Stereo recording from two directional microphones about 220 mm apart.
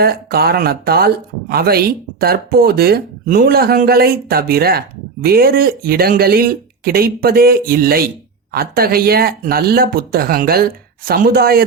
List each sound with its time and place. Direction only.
0.0 s speech: 45° right (ahead or behind)